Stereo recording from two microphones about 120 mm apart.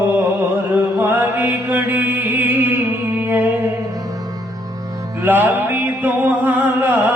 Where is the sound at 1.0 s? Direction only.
15° right (ahead or behind).